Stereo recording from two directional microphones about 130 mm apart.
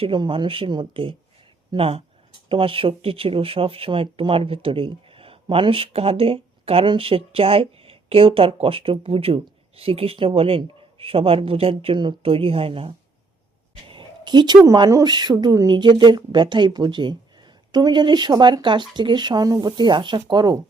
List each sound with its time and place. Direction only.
0.0 s speech: 40° right (ahead or behind)